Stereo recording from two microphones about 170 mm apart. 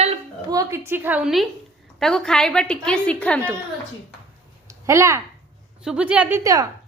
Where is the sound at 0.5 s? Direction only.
20° right (ahead or behind).